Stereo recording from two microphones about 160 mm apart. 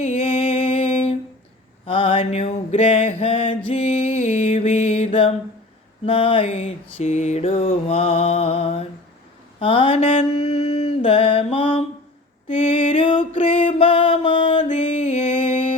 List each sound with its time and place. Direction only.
0.6 s music: 35° left (ahead or behind)
1.9 s a sound: 35° left (ahead or behind)
3.7 s music: 45° left (ahead or behind)
6.1 s mantra: 35° left (ahead or behind)
14.7 s music: 50° left (ahead or behind)